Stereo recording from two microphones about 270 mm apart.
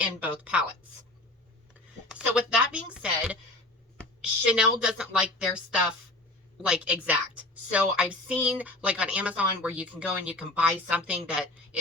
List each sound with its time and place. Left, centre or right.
0.0 s a woman's voice: centre
2.1 s a sound: centre
4.2 s a woman's voice: centre